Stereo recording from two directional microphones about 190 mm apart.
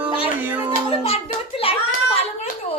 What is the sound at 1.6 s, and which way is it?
Hands, 30° left (ahead or behind).